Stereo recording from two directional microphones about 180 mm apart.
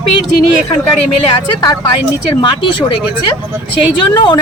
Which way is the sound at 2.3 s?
25° left (ahead or behind).